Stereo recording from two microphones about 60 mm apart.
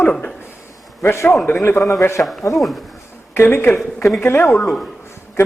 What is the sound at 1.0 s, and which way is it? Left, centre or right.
Speech, left.